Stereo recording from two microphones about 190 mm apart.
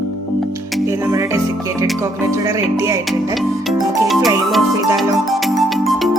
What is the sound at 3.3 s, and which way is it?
Music, centre (ahead or behind).